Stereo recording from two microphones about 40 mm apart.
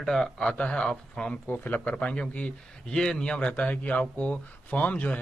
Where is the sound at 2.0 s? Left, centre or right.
Left.